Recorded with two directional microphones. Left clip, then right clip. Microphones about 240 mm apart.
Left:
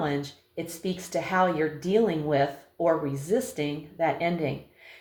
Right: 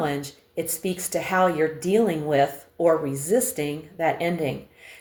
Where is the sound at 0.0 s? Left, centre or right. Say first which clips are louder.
Right 2 dB; right.